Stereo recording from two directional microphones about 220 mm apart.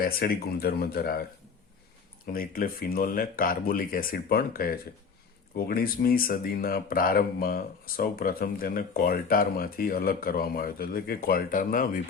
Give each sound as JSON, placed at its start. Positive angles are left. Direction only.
{"t": 0.0, "sound": "speech", "side_deg": 45}
{"t": 2.2, "sound": "speech", "side_deg": 40}